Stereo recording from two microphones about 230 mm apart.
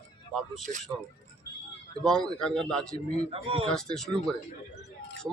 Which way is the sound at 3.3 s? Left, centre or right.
Right.